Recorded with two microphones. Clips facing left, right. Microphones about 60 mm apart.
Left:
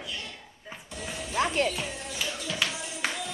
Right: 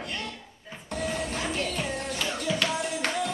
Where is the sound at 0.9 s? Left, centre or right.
Right.